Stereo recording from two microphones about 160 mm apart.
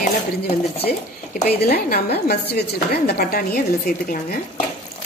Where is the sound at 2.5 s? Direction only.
70° left (ahead or behind).